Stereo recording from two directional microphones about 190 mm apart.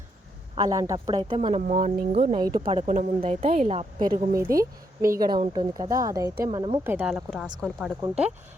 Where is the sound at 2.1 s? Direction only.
30° right (ahead or behind).